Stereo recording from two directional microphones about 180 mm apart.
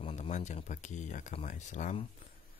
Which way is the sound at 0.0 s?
40° left (ahead or behind).